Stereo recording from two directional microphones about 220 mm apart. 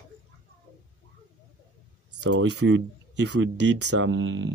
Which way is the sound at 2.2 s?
55° right (ahead or behind).